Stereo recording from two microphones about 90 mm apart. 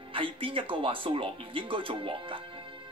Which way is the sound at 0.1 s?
80° right.